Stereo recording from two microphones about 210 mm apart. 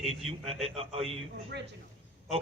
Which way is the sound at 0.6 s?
30° right (ahead or behind).